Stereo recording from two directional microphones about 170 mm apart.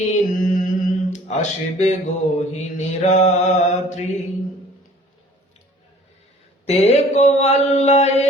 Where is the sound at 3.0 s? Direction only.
40° left (ahead or behind).